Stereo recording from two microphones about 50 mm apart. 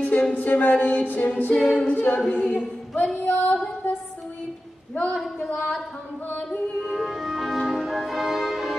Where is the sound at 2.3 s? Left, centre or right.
Left.